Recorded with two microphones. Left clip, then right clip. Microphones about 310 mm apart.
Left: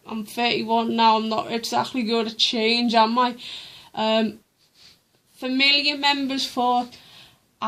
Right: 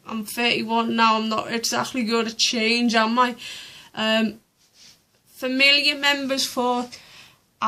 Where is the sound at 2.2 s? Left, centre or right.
Left.